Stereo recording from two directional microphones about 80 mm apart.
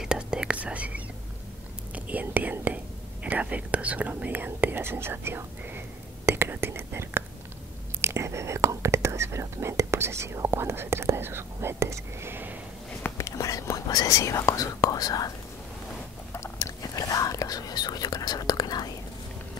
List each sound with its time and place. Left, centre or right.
0.0 s whispering: centre
2.0 s speech: centre
6.2 s whispering: right
8.0 s speech: right
13.2 s whispering: left
13.8 s speech: left
16.3 s whispering: left